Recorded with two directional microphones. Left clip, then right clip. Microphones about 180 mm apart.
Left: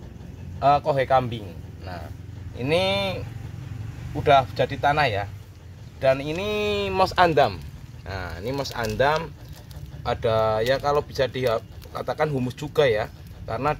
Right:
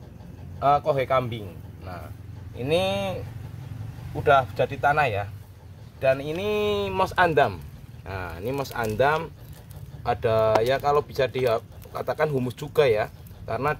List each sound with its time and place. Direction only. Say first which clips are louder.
0.6 s speech: left 1 dB; 25° right (ahead or behind)
2.5 s speech: left 2 dB; 20° right (ahead or behind)
8.1 s speech: even; 45° right (ahead or behind)